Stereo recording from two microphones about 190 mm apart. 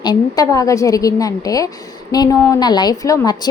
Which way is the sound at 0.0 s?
20° left (ahead or behind).